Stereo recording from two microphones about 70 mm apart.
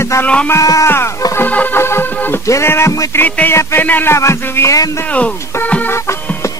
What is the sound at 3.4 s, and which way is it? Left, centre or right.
Music, left.